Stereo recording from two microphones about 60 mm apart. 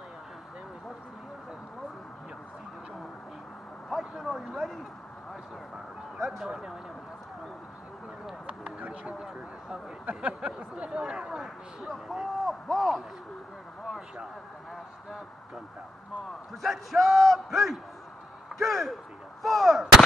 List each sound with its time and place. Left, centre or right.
3.9 s speech: centre
6.1 s speech: centre
6.5 s speech: centre
8.5 s a sound: right
10.7 s speech: centre
11.9 s speech: centre
15.0 s speech: centre
16.6 s speech: centre
18.6 s a sound: centre
19.4 s speech: centre